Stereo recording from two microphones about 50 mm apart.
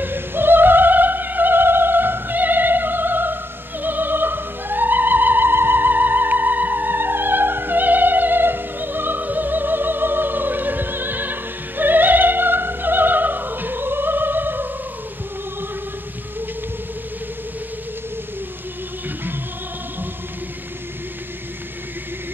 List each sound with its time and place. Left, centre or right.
0.0 s music: right